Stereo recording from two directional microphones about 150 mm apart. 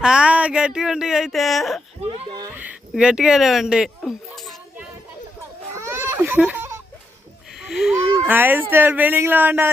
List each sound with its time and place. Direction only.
0.0 s speech: 5° right (ahead or behind)
2.0 s speech: 40° right (ahead or behind)
2.6 s a sound: 5° right (ahead or behind)
5.7 s baby cry: 15° right (ahead or behind)
7.6 s a sound: centre (ahead or behind)
8.1 s a child's voice: 15° right (ahead or behind)